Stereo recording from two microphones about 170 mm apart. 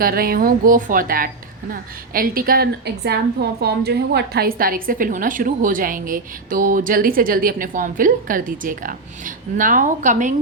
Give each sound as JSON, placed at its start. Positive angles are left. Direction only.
{"t": 0.0, "sound": "a woman's voice", "side_deg": -60}